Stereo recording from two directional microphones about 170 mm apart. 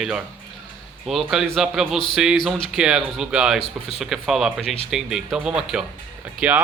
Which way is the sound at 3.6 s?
35° left (ahead or behind).